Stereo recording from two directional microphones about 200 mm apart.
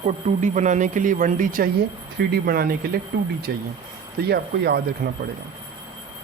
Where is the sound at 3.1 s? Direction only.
60° right (ahead or behind).